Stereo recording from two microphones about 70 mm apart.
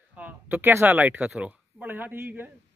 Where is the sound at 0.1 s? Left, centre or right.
Right.